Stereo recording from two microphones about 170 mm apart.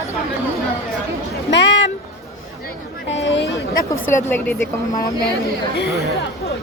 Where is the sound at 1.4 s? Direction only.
90° left.